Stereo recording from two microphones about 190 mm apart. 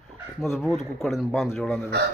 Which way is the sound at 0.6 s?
Centre (ahead or behind).